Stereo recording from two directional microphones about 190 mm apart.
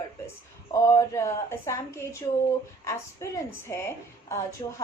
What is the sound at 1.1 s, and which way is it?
A woman's voice, 15° left (ahead or behind).